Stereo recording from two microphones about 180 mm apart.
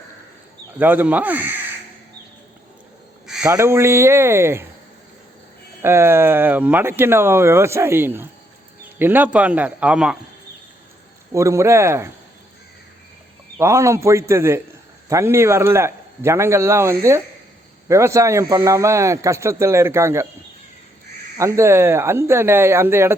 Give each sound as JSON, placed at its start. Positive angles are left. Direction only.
{"t": 0.8, "sound": "speech", "side_deg": -10}
{"t": 3.2, "sound": "a sound", "side_deg": -5}
{"t": 3.5, "sound": "speech", "side_deg": -15}
{"t": 5.8, "sound": "speech", "side_deg": -15}
{"t": 11.3, "sound": "speech", "side_deg": -15}
{"t": 13.6, "sound": "speech", "side_deg": -15}
{"t": 21.3, "sound": "speech", "side_deg": -15}